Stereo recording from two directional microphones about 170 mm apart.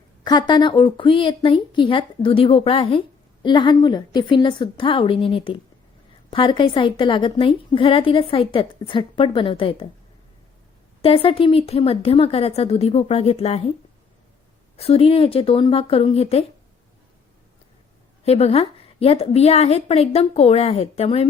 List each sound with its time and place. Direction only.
0.3 s a woman's voice: 25° left (ahead or behind)
11.0 s a woman's voice: 35° left (ahead or behind)
14.8 s a woman's voice: 35° left (ahead or behind)
18.3 s a woman's voice: 40° left (ahead or behind)